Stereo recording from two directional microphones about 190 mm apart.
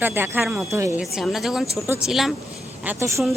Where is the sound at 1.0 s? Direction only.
Centre (ahead or behind).